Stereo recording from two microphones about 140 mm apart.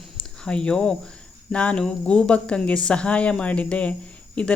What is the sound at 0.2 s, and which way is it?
Speech, 5° left (ahead or behind).